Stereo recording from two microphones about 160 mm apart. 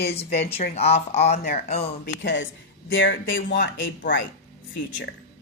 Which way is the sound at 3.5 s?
80° left.